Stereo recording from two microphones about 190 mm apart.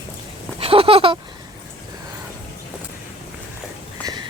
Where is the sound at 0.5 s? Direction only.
30° right (ahead or behind).